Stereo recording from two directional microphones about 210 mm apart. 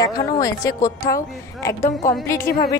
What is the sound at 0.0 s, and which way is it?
A woman's voice, 15° left (ahead or behind).